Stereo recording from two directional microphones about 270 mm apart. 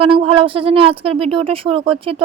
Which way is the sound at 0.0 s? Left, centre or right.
Right.